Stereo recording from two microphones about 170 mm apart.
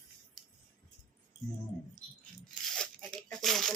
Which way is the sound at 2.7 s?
5° left (ahead or behind).